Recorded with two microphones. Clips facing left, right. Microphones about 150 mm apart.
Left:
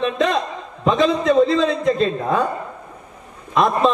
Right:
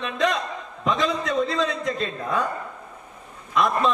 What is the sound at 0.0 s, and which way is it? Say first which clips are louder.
A man's voice: left 5 dB; 30° left (ahead or behind).